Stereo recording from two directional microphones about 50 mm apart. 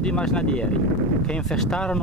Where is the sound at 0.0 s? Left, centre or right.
Centre.